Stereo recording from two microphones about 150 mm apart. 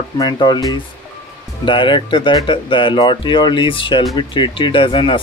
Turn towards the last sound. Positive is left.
turn(degrees=35)  # may be behind; listen again after turning